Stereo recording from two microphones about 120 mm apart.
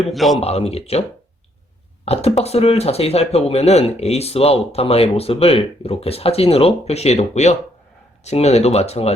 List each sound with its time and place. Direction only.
0.1 s a man's voice: centre (ahead or behind)
0.3 s speech: 60° left (ahead or behind)
2.1 s speech: 60° left (ahead or behind)